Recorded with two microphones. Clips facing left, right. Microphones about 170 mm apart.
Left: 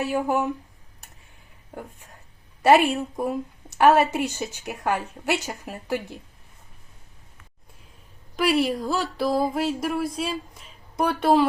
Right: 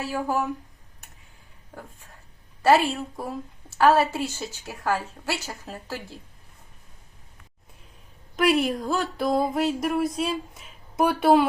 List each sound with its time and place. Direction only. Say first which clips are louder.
0.0 s a woman's voice: left 3 dB; 20° left (ahead or behind)
2.6 s a woman's voice: left 2 dB; 20° left (ahead or behind)
8.4 s speech: even; centre (ahead or behind)